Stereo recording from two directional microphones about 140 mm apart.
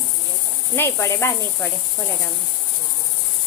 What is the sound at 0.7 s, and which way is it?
Speech, 15° left (ahead or behind).